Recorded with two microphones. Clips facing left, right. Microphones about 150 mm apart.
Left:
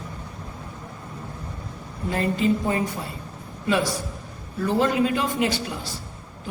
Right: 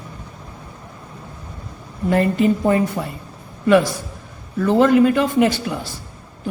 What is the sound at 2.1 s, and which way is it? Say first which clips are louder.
Speech: right 6 dB; 60° right (ahead or behind).